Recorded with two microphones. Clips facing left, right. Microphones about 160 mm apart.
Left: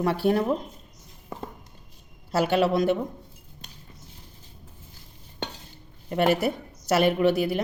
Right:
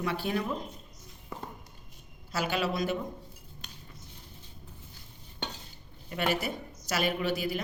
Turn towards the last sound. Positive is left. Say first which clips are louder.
# left 8 dB
turn(degrees=60)  # may be behind; listen again after turning